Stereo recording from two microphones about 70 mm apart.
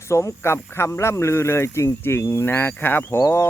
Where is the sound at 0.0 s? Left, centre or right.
Left.